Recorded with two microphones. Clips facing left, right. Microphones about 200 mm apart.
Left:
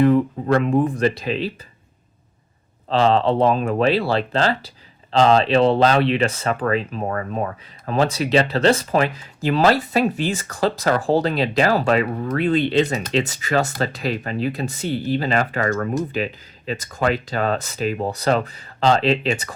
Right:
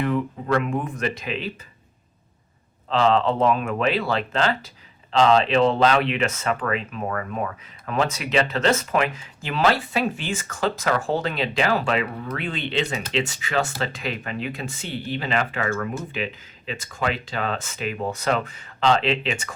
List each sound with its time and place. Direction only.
0.0 s speech: 35° left (ahead or behind)
2.9 s speech: 35° left (ahead or behind)